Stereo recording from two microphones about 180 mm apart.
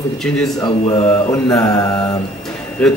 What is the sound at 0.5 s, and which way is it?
Mantra, 20° left (ahead or behind).